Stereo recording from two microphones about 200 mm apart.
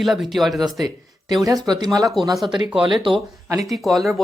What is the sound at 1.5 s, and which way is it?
Speech, 20° right (ahead or behind).